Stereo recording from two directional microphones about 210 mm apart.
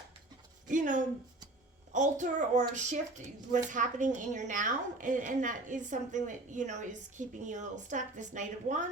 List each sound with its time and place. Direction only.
0.7 s a woman's voice: 40° right (ahead or behind)